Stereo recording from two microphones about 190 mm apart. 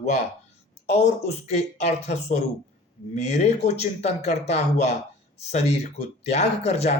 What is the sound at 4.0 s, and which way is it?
Speech, 35° left (ahead or behind).